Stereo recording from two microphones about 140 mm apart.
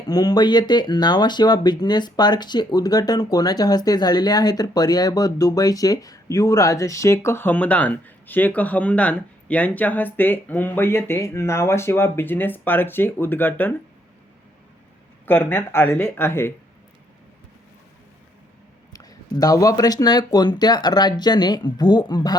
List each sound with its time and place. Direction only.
0.1 s speech: 30° left (ahead or behind)
15.3 s speech: 15° left (ahead or behind)
18.9 s speech: 25° left (ahead or behind)